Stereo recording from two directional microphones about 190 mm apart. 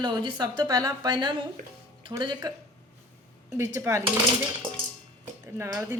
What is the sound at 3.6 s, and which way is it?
Speech, 15° right (ahead or behind).